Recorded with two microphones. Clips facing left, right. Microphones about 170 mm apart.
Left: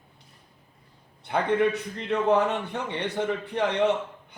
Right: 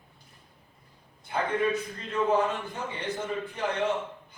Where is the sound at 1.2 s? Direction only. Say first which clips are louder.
Left 4 dB; 70° left (ahead or behind).